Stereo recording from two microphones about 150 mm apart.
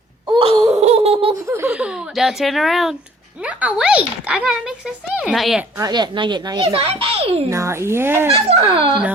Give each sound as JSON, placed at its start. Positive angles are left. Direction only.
{"t": 0.3, "sound": "wail", "side_deg": -40}
{"t": 0.8, "sound": "laughter", "side_deg": -45}
{"t": 1.5, "sound": "a sound", "side_deg": -15}
{"t": 3.4, "sound": "speech", "side_deg": -5}
{"t": 5.8, "sound": "speech", "side_deg": -30}
{"t": 6.7, "sound": "a child's voice", "side_deg": -40}
{"t": 7.5, "sound": "speech", "side_deg": -20}
{"t": 8.3, "sound": "speech", "side_deg": -40}